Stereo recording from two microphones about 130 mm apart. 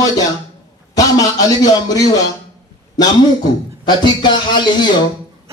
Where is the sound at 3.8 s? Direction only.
35° left (ahead or behind).